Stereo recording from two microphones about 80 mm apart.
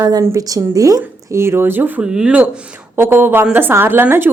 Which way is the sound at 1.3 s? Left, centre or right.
Right.